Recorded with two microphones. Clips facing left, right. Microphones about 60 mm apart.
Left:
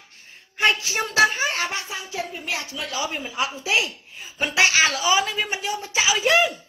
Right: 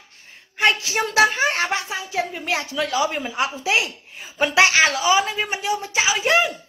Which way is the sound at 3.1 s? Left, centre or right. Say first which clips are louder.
Right 3 dB; right.